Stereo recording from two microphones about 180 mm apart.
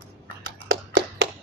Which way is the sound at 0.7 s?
90° right.